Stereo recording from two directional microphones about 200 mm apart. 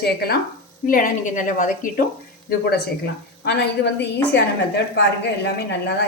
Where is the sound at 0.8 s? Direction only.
45° left (ahead or behind).